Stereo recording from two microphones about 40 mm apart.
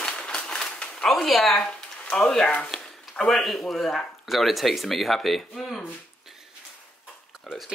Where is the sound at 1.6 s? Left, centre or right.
Left.